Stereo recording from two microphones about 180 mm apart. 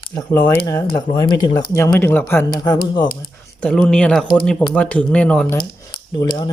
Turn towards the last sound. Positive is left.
turn(degrees=25)  # may be behind; listen again after turning